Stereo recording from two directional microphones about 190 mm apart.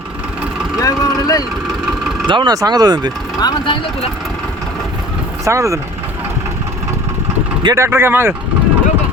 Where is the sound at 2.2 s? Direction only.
25° right (ahead or behind).